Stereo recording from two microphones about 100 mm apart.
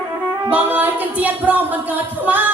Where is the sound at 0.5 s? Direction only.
15° right (ahead or behind).